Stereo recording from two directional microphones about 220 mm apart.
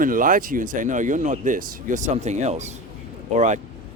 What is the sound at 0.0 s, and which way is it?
A man's voice, 40° right (ahead or behind).